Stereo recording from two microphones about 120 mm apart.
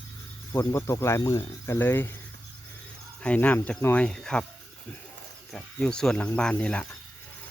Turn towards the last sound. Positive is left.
turn(degrees=10)  # may be behind; listen again after turning